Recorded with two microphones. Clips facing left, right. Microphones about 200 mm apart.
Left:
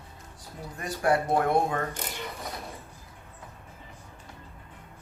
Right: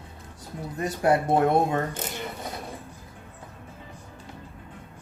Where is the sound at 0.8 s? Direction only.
20° right (ahead or behind).